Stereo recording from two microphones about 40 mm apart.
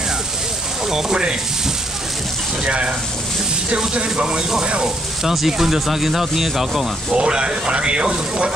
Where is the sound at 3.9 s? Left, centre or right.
Right.